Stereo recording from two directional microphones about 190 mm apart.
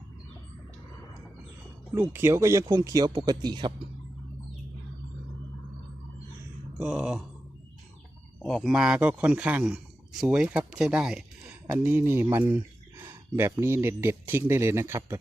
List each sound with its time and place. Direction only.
2.0 s speech: 15° right (ahead or behind)
6.7 s a man's voice: 5° right (ahead or behind)
8.4 s a man's voice: centre (ahead or behind); by 15.2 s 15° right (ahead or behind)